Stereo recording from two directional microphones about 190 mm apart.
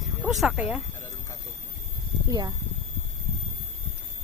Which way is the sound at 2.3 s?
20° right (ahead or behind).